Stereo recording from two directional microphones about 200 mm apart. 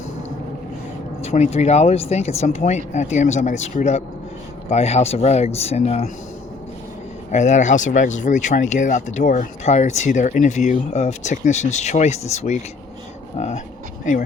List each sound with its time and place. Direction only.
1.2 s speech: 30° left (ahead or behind)
7.3 s speech: 35° left (ahead or behind)
14.0 s speech: 40° left (ahead or behind)